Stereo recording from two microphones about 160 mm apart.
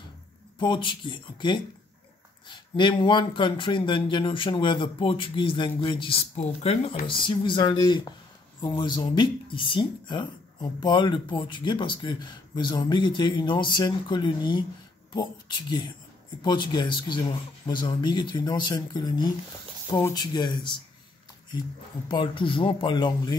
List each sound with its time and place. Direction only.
0.6 s speech: 30° left (ahead or behind)
16.4 s speech: 30° left (ahead or behind)
22.0 s speech: 30° left (ahead or behind)